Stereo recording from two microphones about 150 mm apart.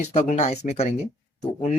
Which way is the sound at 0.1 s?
50° left (ahead or behind).